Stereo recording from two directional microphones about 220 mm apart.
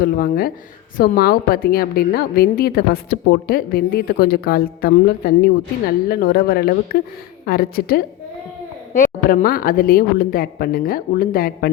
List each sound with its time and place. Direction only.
0.0 s a woman's voice: 45° left (ahead or behind)